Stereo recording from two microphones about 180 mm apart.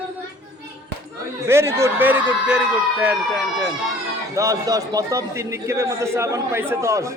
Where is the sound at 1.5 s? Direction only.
15° right (ahead or behind).